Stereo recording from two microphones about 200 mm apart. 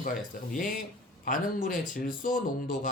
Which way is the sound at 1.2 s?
45° left (ahead or behind).